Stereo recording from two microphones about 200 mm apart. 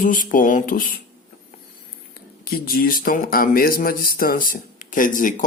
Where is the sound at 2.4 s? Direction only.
45° left (ahead or behind).